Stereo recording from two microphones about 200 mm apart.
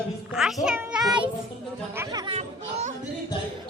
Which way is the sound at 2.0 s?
20° right (ahead or behind).